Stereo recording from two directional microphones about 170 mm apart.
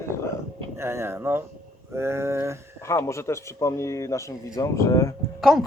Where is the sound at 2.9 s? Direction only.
15° left (ahead or behind).